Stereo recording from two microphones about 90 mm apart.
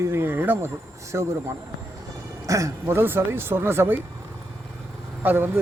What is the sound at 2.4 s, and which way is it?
Speech, 35° right (ahead or behind).